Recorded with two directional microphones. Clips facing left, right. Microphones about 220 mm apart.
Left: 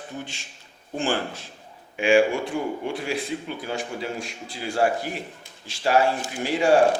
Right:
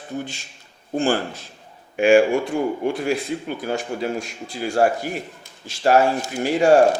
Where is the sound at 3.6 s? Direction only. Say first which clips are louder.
Right 6 dB; 45° right (ahead or behind).